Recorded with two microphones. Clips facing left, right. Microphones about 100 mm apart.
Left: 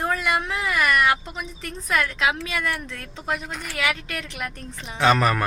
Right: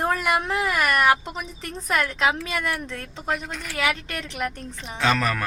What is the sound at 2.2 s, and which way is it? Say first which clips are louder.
Speech: right 1 dB; 35° right (ahead or behind).